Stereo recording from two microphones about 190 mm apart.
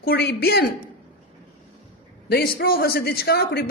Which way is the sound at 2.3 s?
55° left (ahead or behind).